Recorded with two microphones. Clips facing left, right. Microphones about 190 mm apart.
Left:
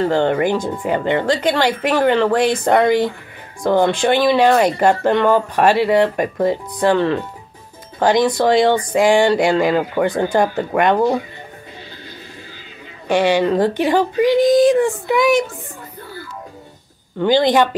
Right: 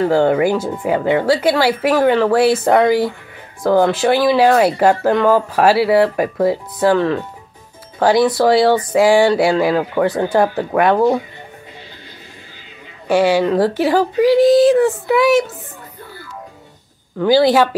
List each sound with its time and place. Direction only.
0.0 s speech: 5° right (ahead or behind)
13.1 s speech: 5° right (ahead or behind)
17.2 s speech: 5° right (ahead or behind)